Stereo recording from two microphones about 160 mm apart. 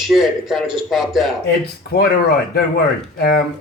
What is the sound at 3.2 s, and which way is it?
Speech, 75° left (ahead or behind).